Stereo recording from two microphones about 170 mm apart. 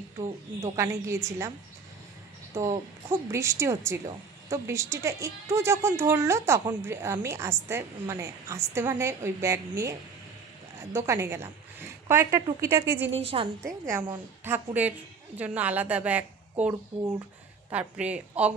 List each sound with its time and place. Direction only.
0.6 s speech: 15° right (ahead or behind)
2.5 s speech: 20° right (ahead or behind)
13.2 s a woman's voice: 35° right (ahead or behind)
13.7 s a woman's voice: 15° right (ahead or behind)